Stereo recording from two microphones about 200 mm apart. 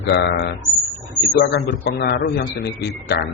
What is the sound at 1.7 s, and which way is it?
A man's voice, 60° left (ahead or behind).